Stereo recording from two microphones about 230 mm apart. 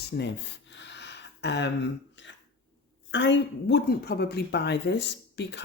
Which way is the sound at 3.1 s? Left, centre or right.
Left.